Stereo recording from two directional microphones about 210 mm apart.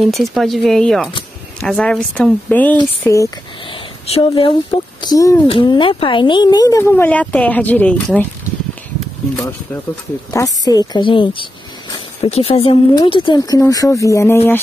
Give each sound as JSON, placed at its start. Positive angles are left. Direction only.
{"t": 0.0, "sound": "speech", "side_deg": 0}
{"t": 4.1, "sound": "speech", "side_deg": 25}
{"t": 10.3, "sound": "speech", "side_deg": 15}